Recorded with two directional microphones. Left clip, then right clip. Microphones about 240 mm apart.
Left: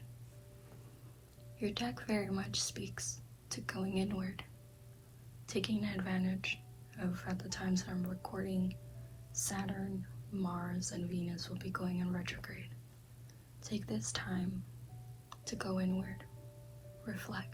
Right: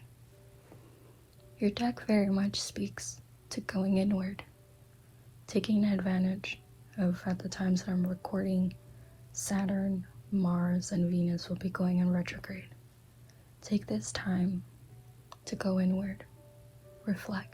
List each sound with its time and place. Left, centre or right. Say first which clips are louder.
1.6 s a woman's voice: right 7 dB; right
5.5 s a woman's voice: right 7 dB; right